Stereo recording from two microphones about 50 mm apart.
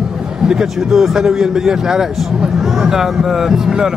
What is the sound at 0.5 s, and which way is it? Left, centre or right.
Speech, centre.